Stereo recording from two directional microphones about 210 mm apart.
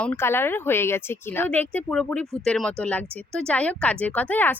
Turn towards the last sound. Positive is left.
turn(degrees=10)  # may be behind; listen again after turning